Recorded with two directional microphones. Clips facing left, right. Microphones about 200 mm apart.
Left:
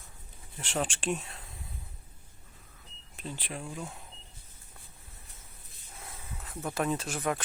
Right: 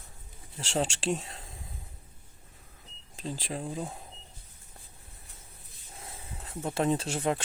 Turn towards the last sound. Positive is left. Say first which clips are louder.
# right 3 dB
turn(degrees=-25)  # may be behind; listen again after turning